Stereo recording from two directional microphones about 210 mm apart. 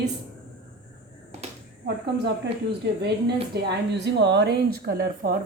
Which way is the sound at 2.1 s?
55° right (ahead or behind).